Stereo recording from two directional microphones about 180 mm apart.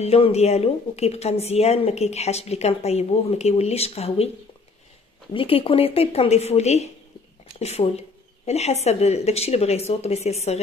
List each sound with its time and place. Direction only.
0.0 s a woman's voice: 35° left (ahead or behind)
5.3 s a woman's voice: 30° left (ahead or behind)